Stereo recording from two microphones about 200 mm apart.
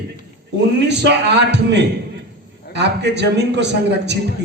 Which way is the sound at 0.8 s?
60° right (ahead or behind).